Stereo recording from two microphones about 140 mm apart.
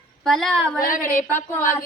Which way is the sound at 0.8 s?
75° left (ahead or behind).